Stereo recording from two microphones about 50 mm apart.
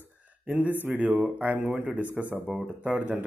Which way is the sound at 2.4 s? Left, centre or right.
Centre.